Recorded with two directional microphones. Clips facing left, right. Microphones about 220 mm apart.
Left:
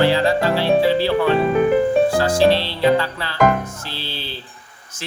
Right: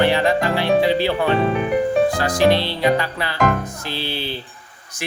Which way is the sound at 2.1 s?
15° right (ahead or behind).